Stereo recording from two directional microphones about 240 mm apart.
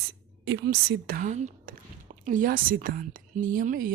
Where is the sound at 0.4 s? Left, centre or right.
Right.